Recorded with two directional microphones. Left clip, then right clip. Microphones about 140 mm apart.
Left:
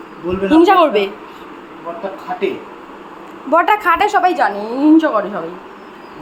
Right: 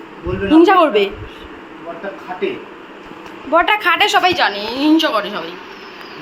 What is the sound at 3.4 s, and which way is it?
A woman's voice, 30° left (ahead or behind).